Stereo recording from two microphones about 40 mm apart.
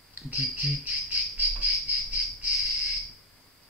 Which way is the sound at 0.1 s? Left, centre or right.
Right.